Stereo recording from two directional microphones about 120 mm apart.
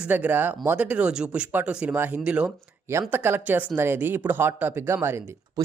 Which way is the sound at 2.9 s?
20° right (ahead or behind).